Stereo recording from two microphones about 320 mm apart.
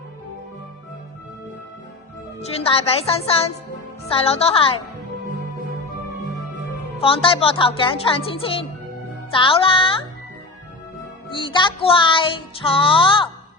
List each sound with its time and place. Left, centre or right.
2.4 s speech: centre
7.0 s music: centre
11.3 s music: centre